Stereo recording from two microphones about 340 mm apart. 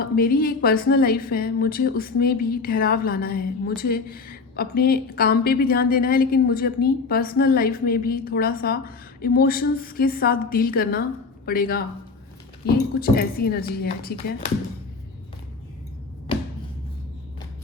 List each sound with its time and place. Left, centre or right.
0.0 s a woman's voice: left
13.0 s a woman's voice: left
16.3 s a sound: centre